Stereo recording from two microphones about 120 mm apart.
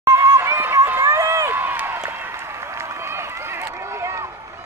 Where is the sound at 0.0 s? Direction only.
25° right (ahead or behind).